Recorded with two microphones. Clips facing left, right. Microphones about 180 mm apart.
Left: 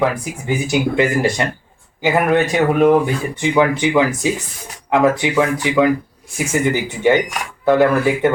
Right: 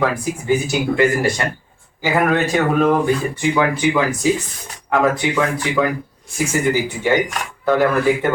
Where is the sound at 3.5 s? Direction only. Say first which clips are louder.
Left 3 dB; 20° left (ahead or behind).